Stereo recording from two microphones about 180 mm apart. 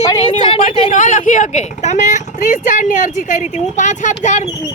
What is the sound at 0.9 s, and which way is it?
Speech, 45° left (ahead or behind).